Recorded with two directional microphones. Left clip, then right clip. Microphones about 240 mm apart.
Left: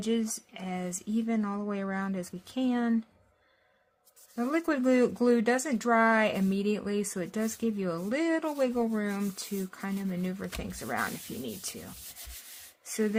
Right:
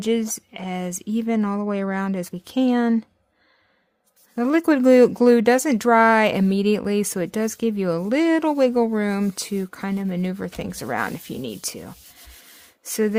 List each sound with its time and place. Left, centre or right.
0.0 s speech: right
4.4 s speech: right